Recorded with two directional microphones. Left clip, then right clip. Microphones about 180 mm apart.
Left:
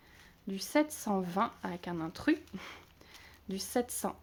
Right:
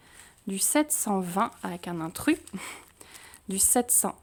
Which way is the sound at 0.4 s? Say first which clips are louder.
Right 4 dB; 40° right (ahead or behind).